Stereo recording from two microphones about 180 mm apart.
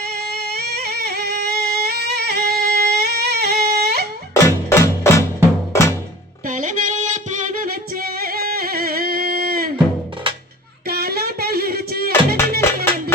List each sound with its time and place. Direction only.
0.0 s music: 60° right (ahead or behind)
4.4 s music: 15° left (ahead or behind)
6.4 s music: 45° right (ahead or behind)
10.3 s music: 30° right (ahead or behind)
10.8 s music: 60° right (ahead or behind)
12.4 s music: 15° left (ahead or behind)